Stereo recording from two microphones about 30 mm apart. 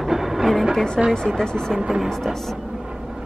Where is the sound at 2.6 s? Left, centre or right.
Centre.